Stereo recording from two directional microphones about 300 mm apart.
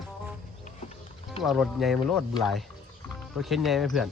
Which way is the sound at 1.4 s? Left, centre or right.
Centre.